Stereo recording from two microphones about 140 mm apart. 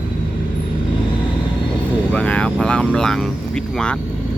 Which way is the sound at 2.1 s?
10° left (ahead or behind).